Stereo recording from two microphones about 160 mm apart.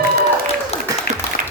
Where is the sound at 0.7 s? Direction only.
40° left (ahead or behind).